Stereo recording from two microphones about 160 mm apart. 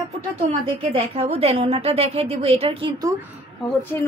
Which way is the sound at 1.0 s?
40° right (ahead or behind).